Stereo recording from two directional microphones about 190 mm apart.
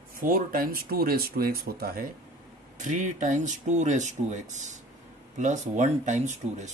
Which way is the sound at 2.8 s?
40° right (ahead or behind).